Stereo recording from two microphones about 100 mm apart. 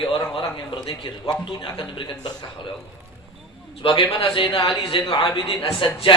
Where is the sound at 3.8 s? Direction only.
55° left (ahead or behind).